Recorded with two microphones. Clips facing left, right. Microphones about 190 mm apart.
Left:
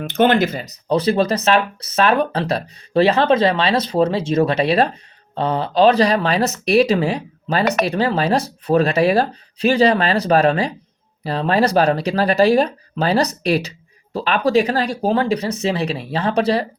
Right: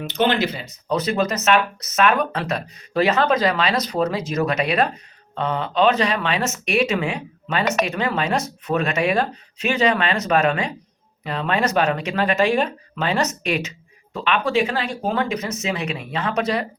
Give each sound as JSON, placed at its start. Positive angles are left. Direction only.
{"t": 0.0, "sound": "speech", "side_deg": 50}